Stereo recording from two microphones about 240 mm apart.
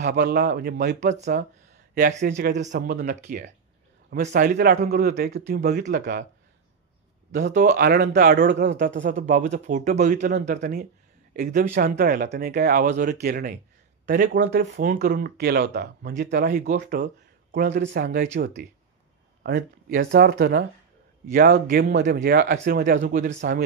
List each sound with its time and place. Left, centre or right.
0.0 s a man's voice: right
0.9 s speech: right
2.2 s a man's voice: right
7.7 s a man's voice: right
14.4 s speech: right
14.7 s a man's voice: right
16.9 s a sound: right
17.8 s a man's voice: right